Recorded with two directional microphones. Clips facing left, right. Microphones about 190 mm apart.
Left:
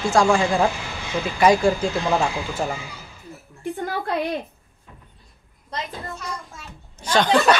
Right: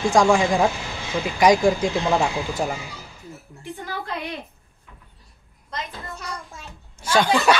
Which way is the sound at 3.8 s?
45° left (ahead or behind).